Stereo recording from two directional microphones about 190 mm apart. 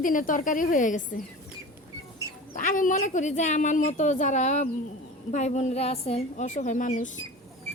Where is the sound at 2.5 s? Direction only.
45° left (ahead or behind).